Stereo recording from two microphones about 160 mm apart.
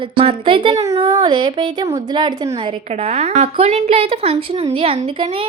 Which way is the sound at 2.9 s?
40° right (ahead or behind).